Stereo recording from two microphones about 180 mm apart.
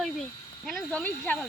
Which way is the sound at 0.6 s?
5° left (ahead or behind).